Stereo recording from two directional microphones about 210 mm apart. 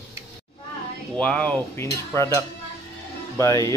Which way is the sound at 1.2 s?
5° left (ahead or behind).